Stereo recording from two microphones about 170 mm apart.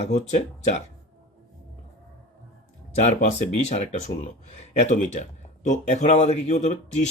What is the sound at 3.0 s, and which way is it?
Speech, 40° left (ahead or behind).